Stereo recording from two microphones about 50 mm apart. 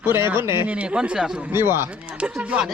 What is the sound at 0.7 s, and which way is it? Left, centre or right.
Speech, right.